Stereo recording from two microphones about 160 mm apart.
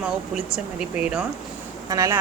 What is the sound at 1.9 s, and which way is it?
Speech, 20° right (ahead or behind).